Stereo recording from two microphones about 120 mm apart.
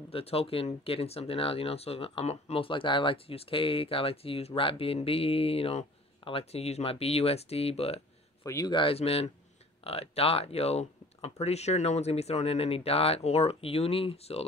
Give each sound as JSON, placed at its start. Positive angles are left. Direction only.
{"t": 0.1, "sound": "speech", "side_deg": 55}
{"t": 8.5, "sound": "speech", "side_deg": 30}
{"t": 8.7, "sound": "speech", "side_deg": 50}